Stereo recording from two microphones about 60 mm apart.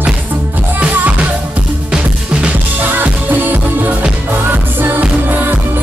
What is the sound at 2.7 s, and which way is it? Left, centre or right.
Music, right.